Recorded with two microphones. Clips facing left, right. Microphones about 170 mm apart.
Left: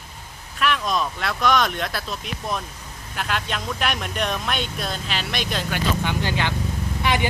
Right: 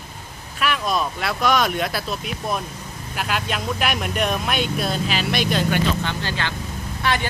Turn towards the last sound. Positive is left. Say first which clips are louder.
# left 1 dB
turn(degrees=15)  # may be behind; listen again after turning